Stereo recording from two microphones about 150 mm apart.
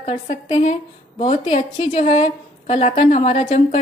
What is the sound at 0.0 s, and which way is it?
A woman's voice, 35° left (ahead or behind).